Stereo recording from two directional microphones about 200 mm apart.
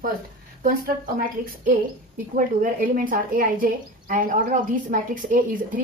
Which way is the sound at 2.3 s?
45° right (ahead or behind).